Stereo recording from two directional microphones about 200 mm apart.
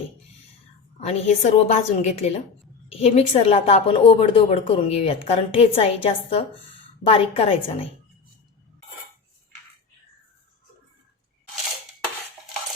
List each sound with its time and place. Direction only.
1.0 s a woman's voice: 35° left (ahead or behind)